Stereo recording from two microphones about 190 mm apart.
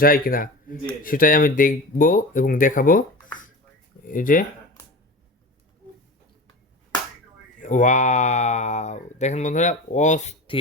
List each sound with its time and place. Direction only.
0.0 s speech: 50° left (ahead or behind)
4.0 s speech: 45° left (ahead or behind)
7.6 s speech: 40° left (ahead or behind)